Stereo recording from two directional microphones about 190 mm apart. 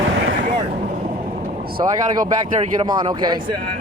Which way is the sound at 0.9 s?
40° right (ahead or behind).